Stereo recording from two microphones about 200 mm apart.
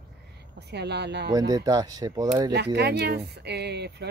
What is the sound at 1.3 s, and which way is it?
Speech, 20° right (ahead or behind).